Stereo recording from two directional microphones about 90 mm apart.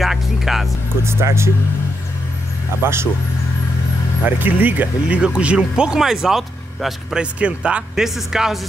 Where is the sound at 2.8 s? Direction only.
25° right (ahead or behind).